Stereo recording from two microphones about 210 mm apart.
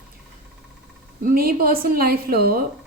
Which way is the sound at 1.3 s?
45° right (ahead or behind).